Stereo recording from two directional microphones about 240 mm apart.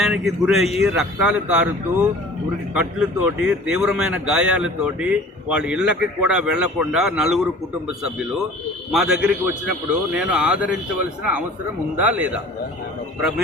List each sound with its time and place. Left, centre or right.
0.0 s speech: centre
8.9 s speech: centre
11.9 s speech: centre